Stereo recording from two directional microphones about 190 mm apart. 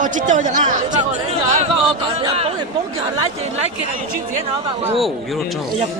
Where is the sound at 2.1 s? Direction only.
30° right (ahead or behind).